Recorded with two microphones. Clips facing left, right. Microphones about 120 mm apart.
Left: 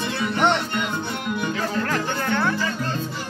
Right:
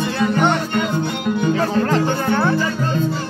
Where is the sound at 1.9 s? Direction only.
25° right (ahead or behind).